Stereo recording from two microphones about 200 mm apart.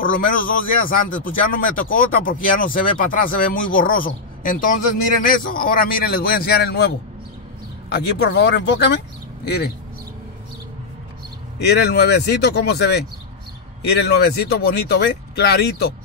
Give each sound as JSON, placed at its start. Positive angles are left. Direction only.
{"t": 0.0, "sound": "speech", "side_deg": 45}
{"t": 7.9, "sound": "speech", "side_deg": 55}
{"t": 11.6, "sound": "speech", "side_deg": 55}